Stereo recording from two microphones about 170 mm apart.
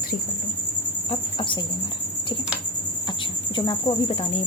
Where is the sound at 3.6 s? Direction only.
30° left (ahead or behind).